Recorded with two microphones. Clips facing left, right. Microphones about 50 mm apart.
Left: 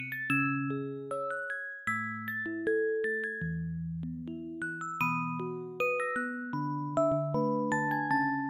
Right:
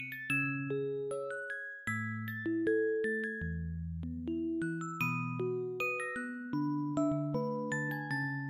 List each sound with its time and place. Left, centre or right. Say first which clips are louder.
0.3 s music: left 4 dB; centre
2.4 s music: even; centre
5.8 s music: left 6 dB; centre
6.6 s music: left 3 dB; left
8.1 s music: left 8 dB; centre